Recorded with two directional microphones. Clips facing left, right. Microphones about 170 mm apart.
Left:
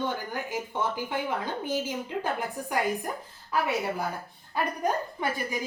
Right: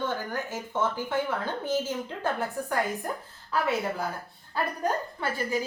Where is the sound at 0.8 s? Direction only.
15° left (ahead or behind).